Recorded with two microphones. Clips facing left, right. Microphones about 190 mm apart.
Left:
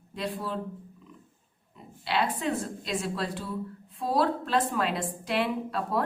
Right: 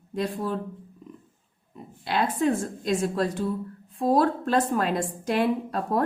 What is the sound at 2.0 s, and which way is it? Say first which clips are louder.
A woman's voice: right 4 dB; 45° right (ahead or behind).